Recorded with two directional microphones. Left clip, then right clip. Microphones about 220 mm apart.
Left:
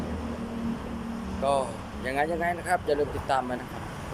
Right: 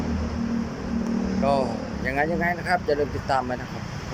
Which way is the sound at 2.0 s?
Centre (ahead or behind).